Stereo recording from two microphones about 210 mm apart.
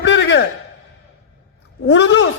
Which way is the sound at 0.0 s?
60° left (ahead or behind).